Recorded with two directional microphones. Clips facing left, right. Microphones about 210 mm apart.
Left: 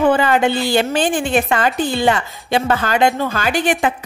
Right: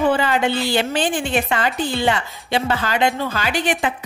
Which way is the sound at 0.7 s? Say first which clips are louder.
Left 3 dB; 45° left (ahead or behind).